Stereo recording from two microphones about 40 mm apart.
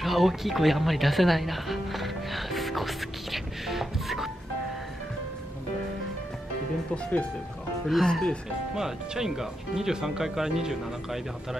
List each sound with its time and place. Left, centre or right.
0.0 s music: centre
6.9 s speech: left
7.9 s speech: centre
8.7 s speech: centre